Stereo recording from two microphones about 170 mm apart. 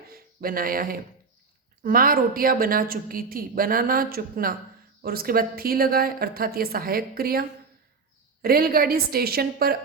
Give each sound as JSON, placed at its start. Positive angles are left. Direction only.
{"t": 0.1, "sound": "a woman's voice", "side_deg": -60}